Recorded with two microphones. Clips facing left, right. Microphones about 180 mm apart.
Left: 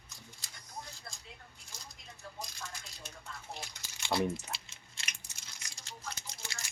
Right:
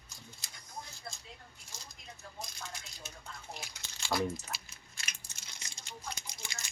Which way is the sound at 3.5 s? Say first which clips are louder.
Left 3 dB; 10° right (ahead or behind).